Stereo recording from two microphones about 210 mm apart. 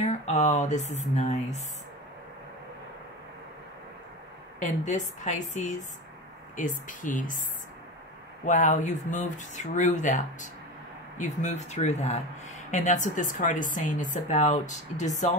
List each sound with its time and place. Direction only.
0.0 s speech: 35° left (ahead or behind)
4.6 s speech: 35° left (ahead or behind)
8.5 s speech: 35° left (ahead or behind)